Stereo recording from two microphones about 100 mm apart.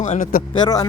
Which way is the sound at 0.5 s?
45° left (ahead or behind).